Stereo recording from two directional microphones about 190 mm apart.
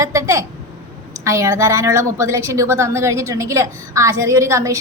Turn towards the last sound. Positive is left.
turn(degrees=-15)  # may be behind; listen again after turning